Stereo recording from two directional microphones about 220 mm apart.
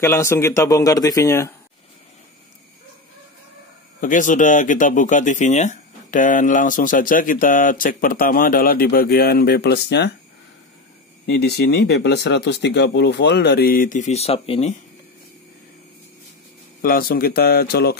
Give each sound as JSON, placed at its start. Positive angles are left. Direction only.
{"t": 0.0, "sound": "speech", "side_deg": 15}
{"t": 4.0, "sound": "speech", "side_deg": 35}
{"t": 11.2, "sound": "speech", "side_deg": 45}
{"t": 16.8, "sound": "speech", "side_deg": 40}